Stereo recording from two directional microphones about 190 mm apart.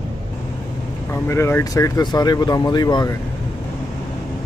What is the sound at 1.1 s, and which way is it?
Speech, 15° left (ahead or behind).